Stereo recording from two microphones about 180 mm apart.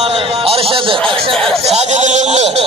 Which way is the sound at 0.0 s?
35° right (ahead or behind).